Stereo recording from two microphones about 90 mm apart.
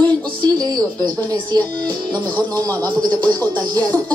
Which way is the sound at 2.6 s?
20° left (ahead or behind).